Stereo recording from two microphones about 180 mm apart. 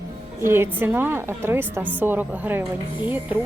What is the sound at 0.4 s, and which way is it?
Speech, 15° right (ahead or behind).